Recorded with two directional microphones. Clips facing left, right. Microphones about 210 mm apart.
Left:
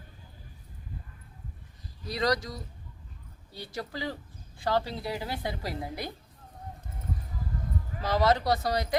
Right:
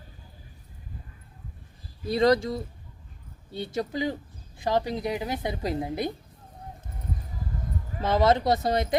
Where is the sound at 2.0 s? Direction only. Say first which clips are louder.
Right 7 dB; 25° right (ahead or behind).